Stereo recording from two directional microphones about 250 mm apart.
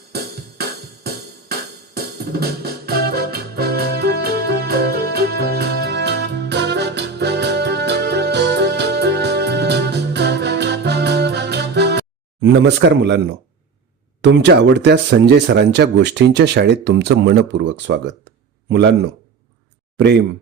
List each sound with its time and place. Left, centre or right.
0.1 s music: right
14.2 s speech: right
20.0 s speech: right